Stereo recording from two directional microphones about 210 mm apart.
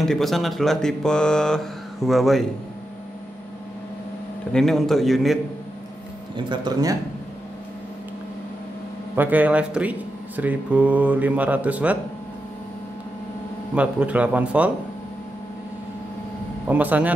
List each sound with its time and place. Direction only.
0.0 s speech: centre (ahead or behind)
4.5 s speech: centre (ahead or behind)
6.3 s speech: 20° right (ahead or behind)
9.1 s speech: 10° right (ahead or behind)
13.7 s speech: 5° right (ahead or behind)
16.6 s speech: 5° right (ahead or behind)